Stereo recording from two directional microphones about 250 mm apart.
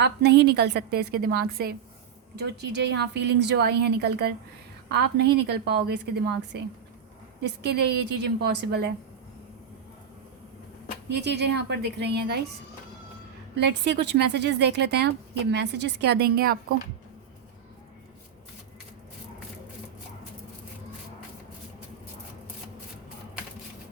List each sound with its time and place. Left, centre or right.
0.0 s a woman's voice: right
11.1 s speech: right
13.6 s speech: right